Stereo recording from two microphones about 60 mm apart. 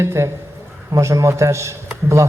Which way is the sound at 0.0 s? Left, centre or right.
Right.